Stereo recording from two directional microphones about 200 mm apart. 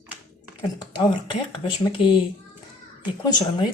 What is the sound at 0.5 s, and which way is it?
Speech, 20° left (ahead or behind).